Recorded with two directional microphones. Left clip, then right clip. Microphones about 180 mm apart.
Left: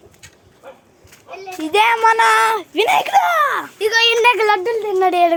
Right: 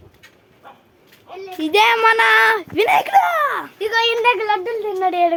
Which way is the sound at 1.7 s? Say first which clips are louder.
Even; 20° right (ahead or behind).